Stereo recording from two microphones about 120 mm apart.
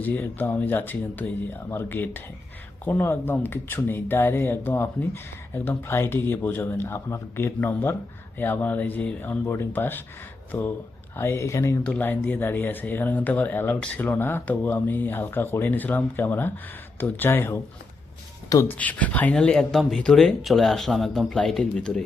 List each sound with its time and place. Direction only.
0.0 s speech: 15° left (ahead or behind)
11.8 s speech: 10° left (ahead or behind)
18.7 s speech: 15° left (ahead or behind)